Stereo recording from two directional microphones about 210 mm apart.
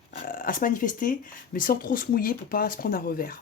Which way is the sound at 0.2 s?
40° left (ahead or behind).